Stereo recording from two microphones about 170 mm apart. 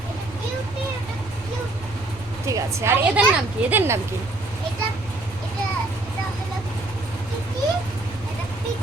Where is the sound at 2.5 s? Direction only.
20° right (ahead or behind).